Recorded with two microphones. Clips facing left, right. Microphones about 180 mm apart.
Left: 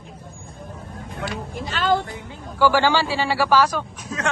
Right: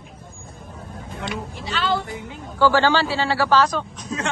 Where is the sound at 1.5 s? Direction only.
45° left (ahead or behind).